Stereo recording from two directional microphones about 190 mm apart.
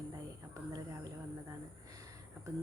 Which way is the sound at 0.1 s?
20° right (ahead or behind).